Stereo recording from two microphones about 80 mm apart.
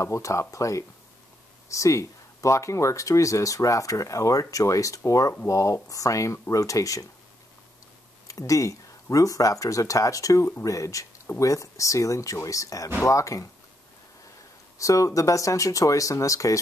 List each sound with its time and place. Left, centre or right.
0.0 s speech: left
8.3 s speech: left
14.8 s speech: left